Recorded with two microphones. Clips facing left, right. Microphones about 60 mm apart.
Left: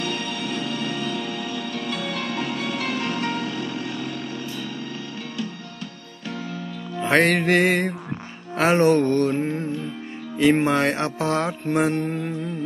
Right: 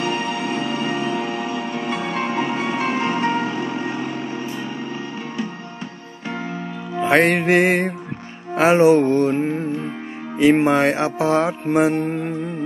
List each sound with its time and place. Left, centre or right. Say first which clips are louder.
0.0 s music: right 5 dB; right
7.0 s music: right 3 dB; centre
12.0 s music: right 3 dB; right